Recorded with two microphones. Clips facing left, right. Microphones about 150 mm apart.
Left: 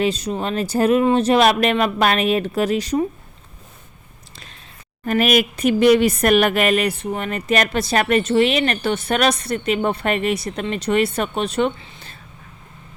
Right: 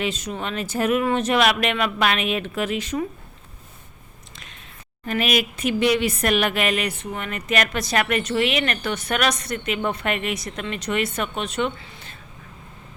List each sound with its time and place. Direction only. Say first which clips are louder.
0.0 s speech: left 6 dB; 35° left (ahead or behind)
5.0 s speech: left 5 dB; 45° left (ahead or behind); by 12.1 s 30° left (ahead or behind)